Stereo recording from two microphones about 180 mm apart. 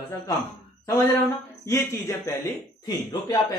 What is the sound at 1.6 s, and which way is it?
A man's voice, 15° left (ahead or behind).